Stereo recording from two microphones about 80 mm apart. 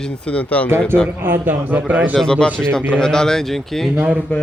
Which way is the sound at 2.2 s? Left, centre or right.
Centre.